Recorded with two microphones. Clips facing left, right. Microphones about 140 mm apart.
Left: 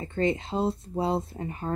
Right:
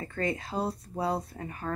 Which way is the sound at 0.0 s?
25° left (ahead or behind).